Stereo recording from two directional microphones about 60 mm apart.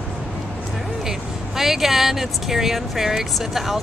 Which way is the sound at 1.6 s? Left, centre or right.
Centre.